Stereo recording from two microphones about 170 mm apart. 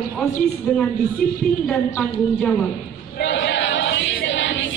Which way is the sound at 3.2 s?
90° left.